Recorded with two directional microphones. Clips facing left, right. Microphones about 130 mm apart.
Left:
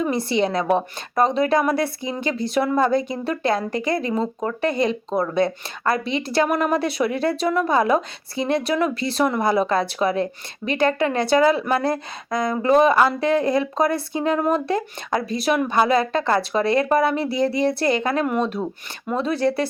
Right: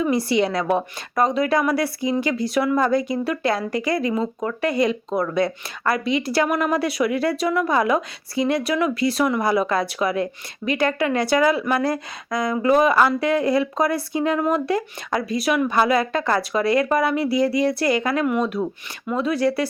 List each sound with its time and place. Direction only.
0.0 s speech: 25° left (ahead or behind)